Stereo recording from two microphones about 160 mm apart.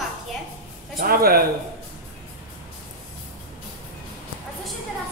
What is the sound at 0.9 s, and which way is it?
Speech, 65° right (ahead or behind).